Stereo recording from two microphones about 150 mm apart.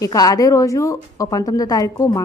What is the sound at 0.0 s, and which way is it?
A woman's voice, 25° left (ahead or behind).